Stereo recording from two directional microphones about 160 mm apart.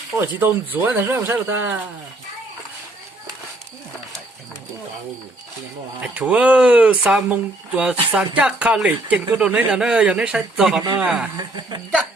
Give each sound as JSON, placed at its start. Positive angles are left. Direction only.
{"t": 0.2, "sound": "speech", "side_deg": -15}
{"t": 6.0, "sound": "speech", "side_deg": -10}
{"t": 11.3, "sound": "speech", "side_deg": -25}